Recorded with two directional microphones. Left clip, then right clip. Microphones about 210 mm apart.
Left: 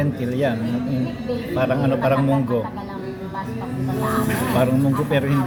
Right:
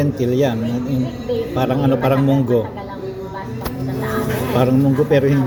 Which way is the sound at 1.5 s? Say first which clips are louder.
Even; 20° right (ahead or behind).